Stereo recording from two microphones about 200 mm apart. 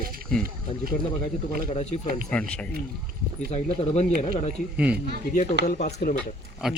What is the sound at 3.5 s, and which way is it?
Speech, 30° left (ahead or behind).